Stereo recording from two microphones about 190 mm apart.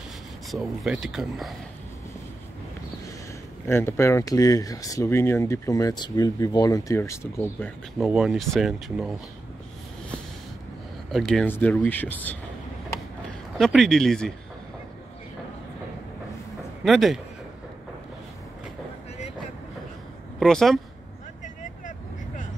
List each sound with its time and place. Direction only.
0.5 s speech: centre (ahead or behind)
3.6 s speech: 15° left (ahead or behind)
8.0 s speech: 5° right (ahead or behind)
11.1 s speech: centre (ahead or behind)
13.6 s speech: centre (ahead or behind)
16.8 s speech: centre (ahead or behind)
20.3 s speech: centre (ahead or behind)